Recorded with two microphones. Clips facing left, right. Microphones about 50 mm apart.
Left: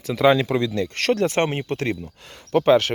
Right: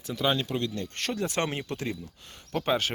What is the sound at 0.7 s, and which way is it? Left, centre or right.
Speech, left.